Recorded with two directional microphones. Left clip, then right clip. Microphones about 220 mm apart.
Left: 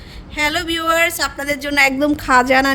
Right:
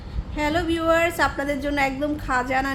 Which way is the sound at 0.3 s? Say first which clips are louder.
Left 5 dB; 50° left (ahead or behind).